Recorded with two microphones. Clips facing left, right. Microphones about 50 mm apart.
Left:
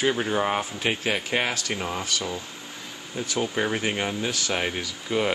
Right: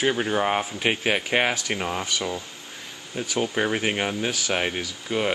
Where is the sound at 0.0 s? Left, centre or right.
Centre.